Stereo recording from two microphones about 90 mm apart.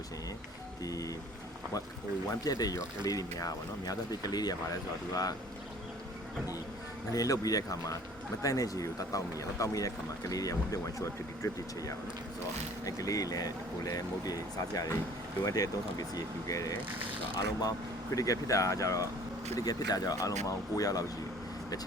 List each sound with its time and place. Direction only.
0.9 s speech: 40° left (ahead or behind)
2.4 s speech: 45° left (ahead or behind)
7.1 s speech: 40° left (ahead or behind)
17.0 s speech: 70° right (ahead or behind)
17.3 s speech: 45° left (ahead or behind)